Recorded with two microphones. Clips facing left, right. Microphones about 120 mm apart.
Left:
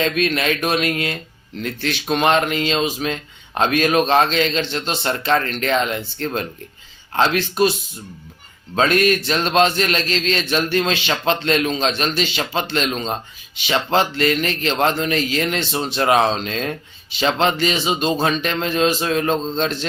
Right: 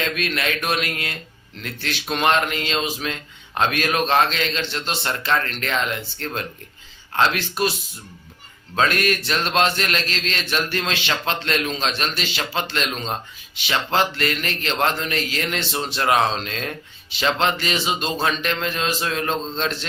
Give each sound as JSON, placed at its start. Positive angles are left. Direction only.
{"t": 0.0, "sound": "a man's voice", "side_deg": 25}
{"t": 7.2, "sound": "a man's voice", "side_deg": 25}
{"t": 8.7, "sound": "a man's voice", "side_deg": 25}